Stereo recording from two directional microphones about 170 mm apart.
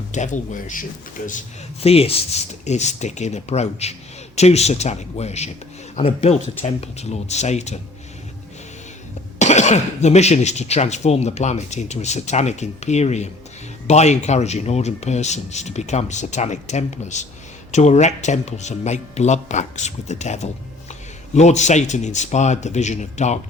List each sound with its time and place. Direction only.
0.1 s a man's voice: 45° left (ahead or behind)
9.4 s a man's voice: 40° left (ahead or behind)